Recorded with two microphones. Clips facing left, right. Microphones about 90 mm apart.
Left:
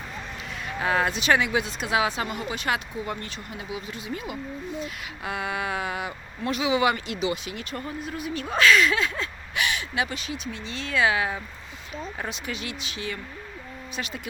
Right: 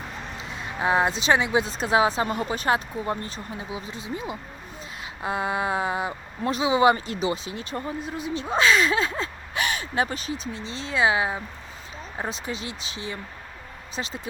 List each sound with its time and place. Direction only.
0.5 s speech: 25° right (ahead or behind)